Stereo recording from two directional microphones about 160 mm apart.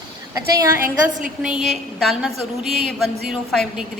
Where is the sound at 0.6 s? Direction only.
15° right (ahead or behind).